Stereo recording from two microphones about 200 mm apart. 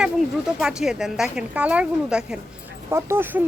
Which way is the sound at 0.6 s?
5° right (ahead or behind).